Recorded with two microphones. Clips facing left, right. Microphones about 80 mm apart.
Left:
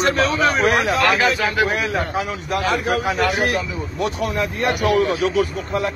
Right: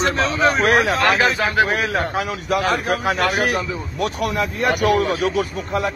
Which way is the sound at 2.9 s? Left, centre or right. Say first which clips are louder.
Even; right.